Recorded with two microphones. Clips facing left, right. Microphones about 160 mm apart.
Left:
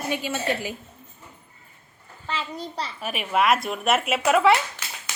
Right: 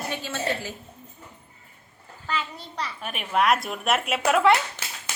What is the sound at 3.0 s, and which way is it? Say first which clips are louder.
A woman's voice: left 1 dB; 5° left (ahead or behind).